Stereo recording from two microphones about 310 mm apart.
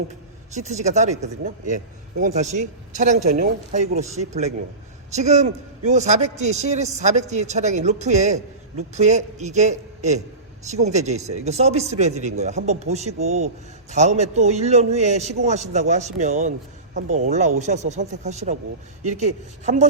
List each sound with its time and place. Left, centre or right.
0.5 s speech: right